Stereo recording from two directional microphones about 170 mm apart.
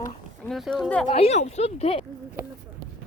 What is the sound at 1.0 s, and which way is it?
Speech, 35° left (ahead or behind).